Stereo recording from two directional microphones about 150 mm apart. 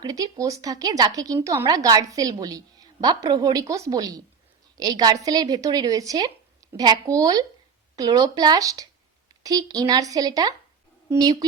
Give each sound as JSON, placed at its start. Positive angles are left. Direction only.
{"t": 0.0, "sound": "a woman's voice", "side_deg": -25}